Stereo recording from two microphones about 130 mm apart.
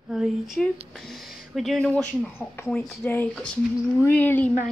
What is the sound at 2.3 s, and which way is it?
Speech, 15° left (ahead or behind).